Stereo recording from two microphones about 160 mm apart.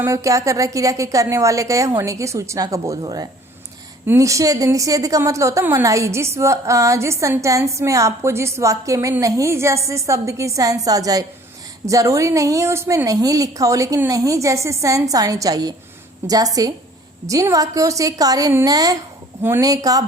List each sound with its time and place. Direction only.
0.0 s a woman's voice: 20° right (ahead or behind)